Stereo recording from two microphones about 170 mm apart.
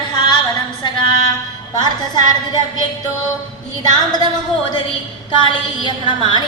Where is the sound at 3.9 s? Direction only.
25° left (ahead or behind).